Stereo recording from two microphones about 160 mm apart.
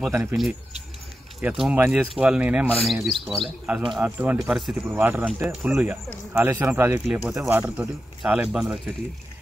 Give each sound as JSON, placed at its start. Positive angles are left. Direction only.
{"t": 0.1, "sound": "speech", "side_deg": -15}
{"t": 1.4, "sound": "speech", "side_deg": -5}